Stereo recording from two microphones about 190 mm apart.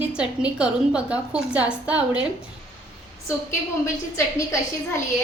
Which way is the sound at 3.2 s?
15° left (ahead or behind).